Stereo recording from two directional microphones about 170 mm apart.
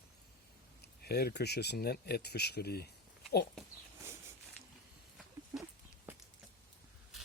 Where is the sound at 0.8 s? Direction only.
70° left (ahead or behind).